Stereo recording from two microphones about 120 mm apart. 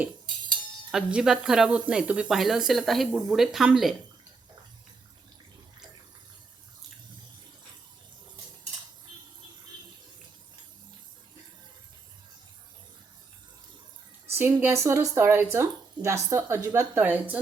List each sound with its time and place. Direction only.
0.9 s speech: 5° right (ahead or behind)
14.3 s speech: 20° right (ahead or behind)